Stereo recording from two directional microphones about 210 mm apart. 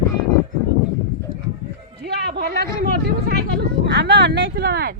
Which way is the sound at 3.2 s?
50° right (ahead or behind).